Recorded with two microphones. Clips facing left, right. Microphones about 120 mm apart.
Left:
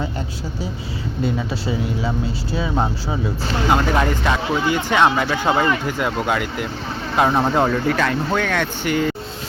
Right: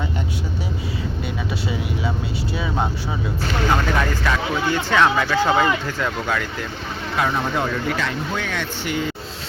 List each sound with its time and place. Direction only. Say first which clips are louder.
3.7 s speech: left 4 dB; 15° left (ahead or behind)
7.2 s speech: left 5 dB; 30° left (ahead or behind); by 9.0 s 55° left (ahead or behind)